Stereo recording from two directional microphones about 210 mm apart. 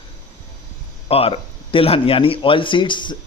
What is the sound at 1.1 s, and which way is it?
Speech, 25° left (ahead or behind).